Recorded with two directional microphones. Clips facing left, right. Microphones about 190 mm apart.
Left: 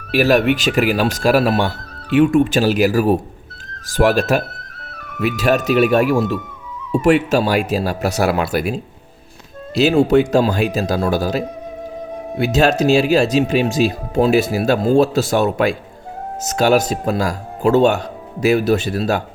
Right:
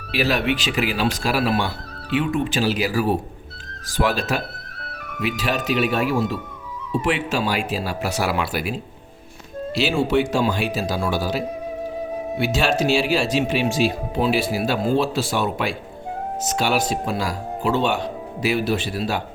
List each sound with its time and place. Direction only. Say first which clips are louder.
0.1 s speech: left 7 dB; 45° left (ahead or behind)
9.7 s speech: left 7 dB; 40° left (ahead or behind)
12.5 s speech: left 7 dB; 40° left (ahead or behind)